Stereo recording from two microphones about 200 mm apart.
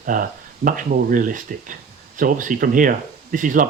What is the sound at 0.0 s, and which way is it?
Speech, 45° right (ahead or behind).